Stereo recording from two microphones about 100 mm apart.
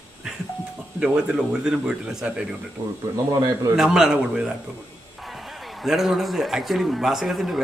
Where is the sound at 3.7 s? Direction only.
5° right (ahead or behind).